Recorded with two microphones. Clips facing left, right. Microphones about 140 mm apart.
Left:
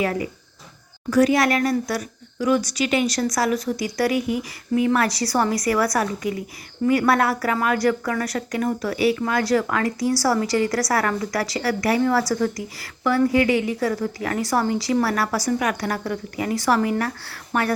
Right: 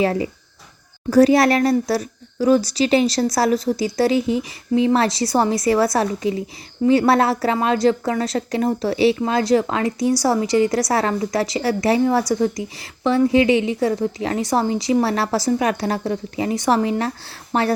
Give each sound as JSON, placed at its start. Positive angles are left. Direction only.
{"t": 0.0, "sound": "a woman's voice", "side_deg": -30}